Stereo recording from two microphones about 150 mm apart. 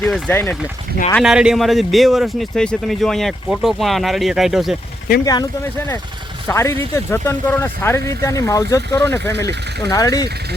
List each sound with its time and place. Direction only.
0.3 s speech: 15° left (ahead or behind)
1.2 s a man's voice: 5° right (ahead or behind)
5.2 s speech: 25° left (ahead or behind)
6.5 s speech: 20° left (ahead or behind)